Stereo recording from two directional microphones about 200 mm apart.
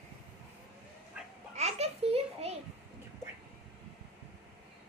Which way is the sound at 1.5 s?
30° right (ahead or behind).